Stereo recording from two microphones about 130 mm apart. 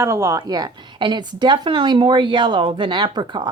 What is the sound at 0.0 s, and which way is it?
A woman's voice, 25° right (ahead or behind).